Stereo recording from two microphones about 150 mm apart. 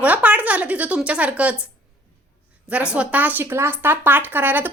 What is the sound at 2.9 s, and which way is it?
Speech, 10° right (ahead or behind).